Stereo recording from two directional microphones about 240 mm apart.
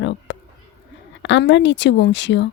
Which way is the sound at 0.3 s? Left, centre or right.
Left.